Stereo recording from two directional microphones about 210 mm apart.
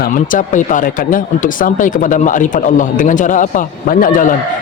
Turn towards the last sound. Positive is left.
turn(degrees=40)  # may be behind; listen again after turning